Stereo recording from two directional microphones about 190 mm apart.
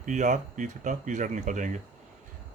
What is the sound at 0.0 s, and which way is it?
Speech, 40° right (ahead or behind).